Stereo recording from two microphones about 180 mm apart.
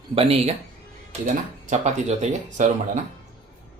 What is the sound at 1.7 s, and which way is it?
Speech, 40° right (ahead or behind).